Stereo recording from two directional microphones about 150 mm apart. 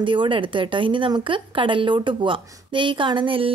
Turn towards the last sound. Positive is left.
turn(degrees=-35)  # may be behind; listen again after turning